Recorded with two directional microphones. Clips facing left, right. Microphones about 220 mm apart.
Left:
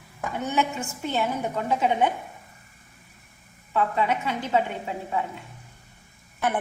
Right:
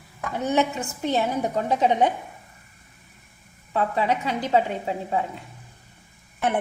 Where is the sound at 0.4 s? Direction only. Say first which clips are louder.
Right 4 dB; 40° right (ahead or behind).